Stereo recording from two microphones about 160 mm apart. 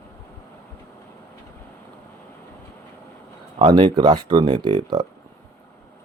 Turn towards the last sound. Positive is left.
turn(degrees=-30)  # may be behind; listen again after turning